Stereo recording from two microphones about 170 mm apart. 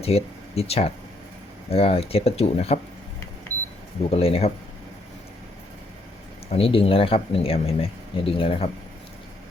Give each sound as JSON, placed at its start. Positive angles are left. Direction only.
{"t": 0.0, "sound": "speech", "side_deg": 35}
{"t": 4.1, "sound": "speech", "side_deg": 35}
{"t": 6.5, "sound": "speech", "side_deg": 35}